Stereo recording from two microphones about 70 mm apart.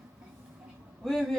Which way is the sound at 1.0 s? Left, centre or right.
Centre.